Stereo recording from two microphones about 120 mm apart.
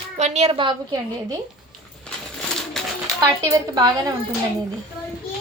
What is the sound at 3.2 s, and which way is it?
Speech, 30° right (ahead or behind).